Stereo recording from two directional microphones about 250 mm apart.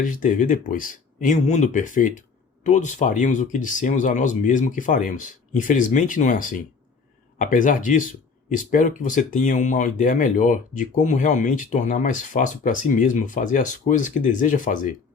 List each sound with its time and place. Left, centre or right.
0.0 s speech: left